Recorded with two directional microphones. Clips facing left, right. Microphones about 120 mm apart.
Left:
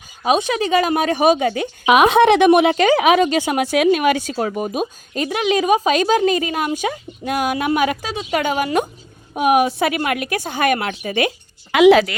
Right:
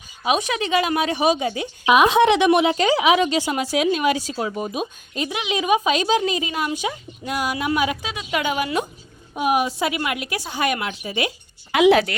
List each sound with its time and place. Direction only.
0.2 s a woman's voice: 35° left (ahead or behind); by 8.1 s 50° left (ahead or behind)
8.1 s a woman's voice: 30° left (ahead or behind)
8.4 s a woman's voice: 45° left (ahead or behind)
9.3 s a woman's voice: 60° left (ahead or behind)
11.7 s a woman's voice: 90° left